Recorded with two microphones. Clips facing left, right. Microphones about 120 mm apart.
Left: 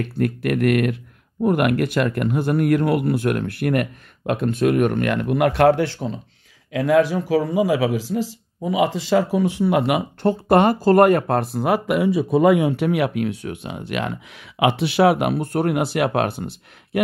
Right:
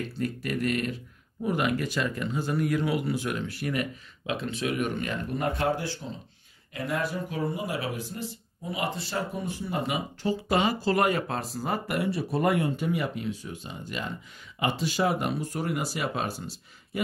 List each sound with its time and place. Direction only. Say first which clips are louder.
0.0 s speech: left 9 dB; 60° left (ahead or behind)
6.7 s speech: left 13 dB; 90° left; by 17.0 s 60° left (ahead or behind)